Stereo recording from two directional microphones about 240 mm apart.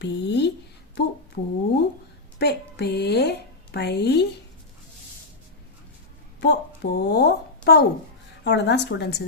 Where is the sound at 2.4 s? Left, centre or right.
Left.